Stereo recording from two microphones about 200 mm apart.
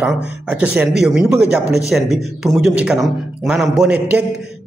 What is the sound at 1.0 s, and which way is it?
A man's voice, 5° right (ahead or behind).